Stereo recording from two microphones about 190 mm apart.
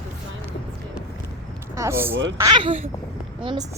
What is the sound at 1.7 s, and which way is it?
Speech, 15° right (ahead or behind).